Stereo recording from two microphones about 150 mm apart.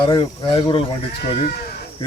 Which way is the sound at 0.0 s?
30° left (ahead or behind).